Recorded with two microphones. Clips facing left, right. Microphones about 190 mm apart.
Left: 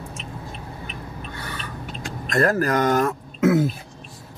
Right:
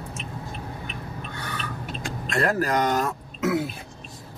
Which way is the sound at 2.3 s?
45° left (ahead or behind).